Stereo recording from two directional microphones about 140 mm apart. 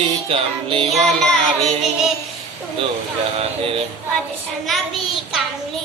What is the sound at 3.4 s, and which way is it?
Music, 40° right (ahead or behind).